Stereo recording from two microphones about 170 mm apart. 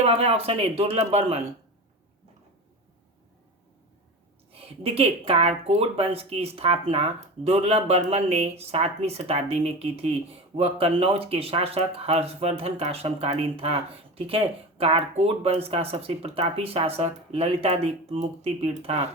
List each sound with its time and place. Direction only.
0.0 s speech: 35° right (ahead or behind)
4.5 s speech: 35° right (ahead or behind)